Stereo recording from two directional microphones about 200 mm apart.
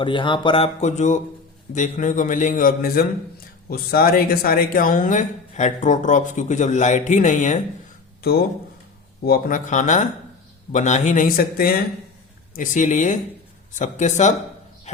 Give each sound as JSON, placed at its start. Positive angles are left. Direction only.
{"t": 0.0, "sound": "speech", "side_deg": 25}
{"t": 9.2, "sound": "speech", "side_deg": 45}
{"t": 14.9, "sound": "a sound", "side_deg": 35}